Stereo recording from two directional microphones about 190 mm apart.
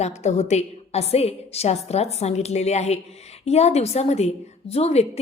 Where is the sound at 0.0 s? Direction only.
35° left (ahead or behind).